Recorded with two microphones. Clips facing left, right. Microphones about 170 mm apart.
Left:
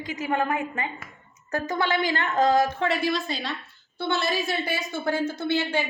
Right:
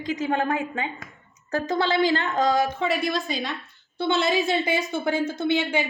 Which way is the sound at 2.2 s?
10° right (ahead or behind).